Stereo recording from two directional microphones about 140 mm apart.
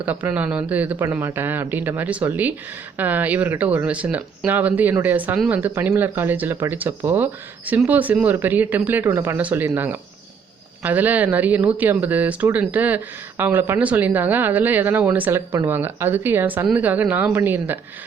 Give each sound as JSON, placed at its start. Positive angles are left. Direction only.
{"t": 0.0, "sound": "speech", "side_deg": -10}